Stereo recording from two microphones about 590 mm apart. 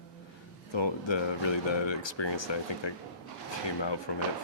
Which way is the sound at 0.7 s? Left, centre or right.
Left.